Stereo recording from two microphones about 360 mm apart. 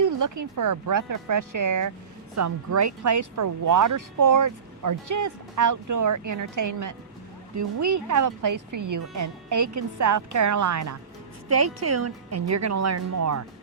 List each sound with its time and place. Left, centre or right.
0.0 s speech: right